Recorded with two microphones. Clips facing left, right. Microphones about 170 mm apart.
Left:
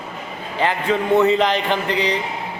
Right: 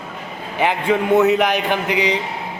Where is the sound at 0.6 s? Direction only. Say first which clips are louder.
Right 2 dB; 15° right (ahead or behind).